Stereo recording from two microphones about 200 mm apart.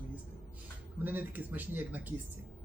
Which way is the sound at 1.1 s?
10° right (ahead or behind).